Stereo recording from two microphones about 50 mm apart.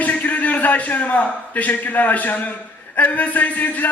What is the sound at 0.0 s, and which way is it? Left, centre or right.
A man's voice, left.